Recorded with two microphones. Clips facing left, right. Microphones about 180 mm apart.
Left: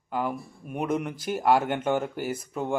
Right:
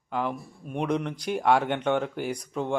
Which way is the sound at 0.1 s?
5° left (ahead or behind).